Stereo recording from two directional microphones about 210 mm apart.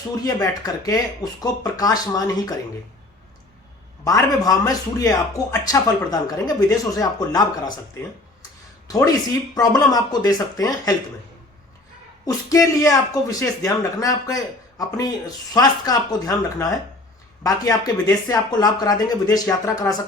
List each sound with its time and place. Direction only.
0.3 s speech: 20° left (ahead or behind)
4.0 s speech: 15° left (ahead or behind)
8.9 s speech: 15° left (ahead or behind)
12.2 s speech: 15° left (ahead or behind)